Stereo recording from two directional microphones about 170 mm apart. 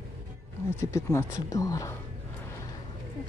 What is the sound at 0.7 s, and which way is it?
Speech, 15° left (ahead or behind).